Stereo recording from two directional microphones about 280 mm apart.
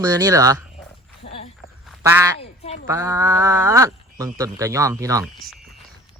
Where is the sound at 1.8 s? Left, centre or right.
Centre.